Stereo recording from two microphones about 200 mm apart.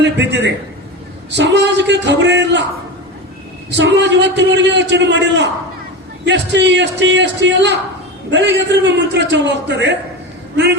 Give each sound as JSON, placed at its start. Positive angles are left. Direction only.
{"t": 0.0, "sound": "a man's voice", "side_deg": -60}
{"t": 3.7, "sound": "a man's voice", "side_deg": -60}